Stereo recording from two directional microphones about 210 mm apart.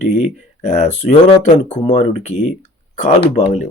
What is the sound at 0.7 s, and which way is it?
Speech, 30° left (ahead or behind).